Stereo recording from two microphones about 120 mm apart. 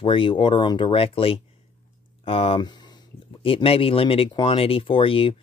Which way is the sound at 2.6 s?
35° left (ahead or behind).